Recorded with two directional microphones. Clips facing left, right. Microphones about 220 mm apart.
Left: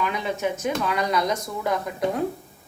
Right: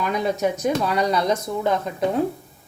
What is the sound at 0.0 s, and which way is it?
A woman's voice, 40° right (ahead or behind).